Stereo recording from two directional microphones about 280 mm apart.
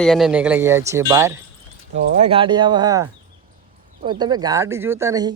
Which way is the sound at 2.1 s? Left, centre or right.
Right.